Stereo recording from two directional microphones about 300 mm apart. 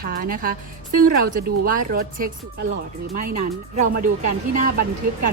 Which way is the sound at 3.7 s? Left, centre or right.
Right.